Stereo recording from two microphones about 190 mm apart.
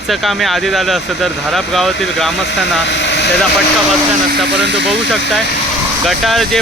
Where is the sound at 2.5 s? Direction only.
70° left (ahead or behind).